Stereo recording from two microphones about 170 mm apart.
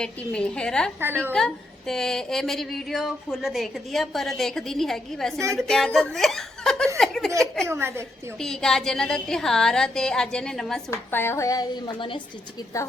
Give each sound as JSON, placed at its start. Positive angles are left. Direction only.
{"t": 0.0, "sound": "speech", "side_deg": 5}
{"t": 1.0, "sound": "a woman's voice", "side_deg": -10}
{"t": 1.3, "sound": "speech", "side_deg": 5}
{"t": 7.0, "sound": "a sound", "side_deg": 0}
{"t": 7.7, "sound": "a woman's voice", "side_deg": -15}
{"t": 8.4, "sound": "speech", "side_deg": 5}
{"t": 10.9, "sound": "speech", "side_deg": 15}